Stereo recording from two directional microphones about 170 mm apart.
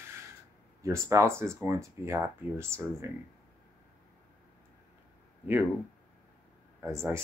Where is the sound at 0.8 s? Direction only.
15° right (ahead or behind).